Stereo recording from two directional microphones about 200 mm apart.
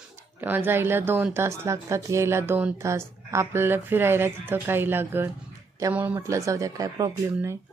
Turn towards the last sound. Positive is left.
turn(degrees=-15)  # may be behind; listen again after turning